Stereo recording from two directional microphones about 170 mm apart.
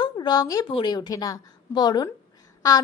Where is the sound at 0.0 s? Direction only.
25° left (ahead or behind).